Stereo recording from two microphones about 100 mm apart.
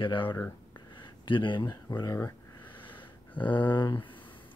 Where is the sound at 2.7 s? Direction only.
55° left (ahead or behind).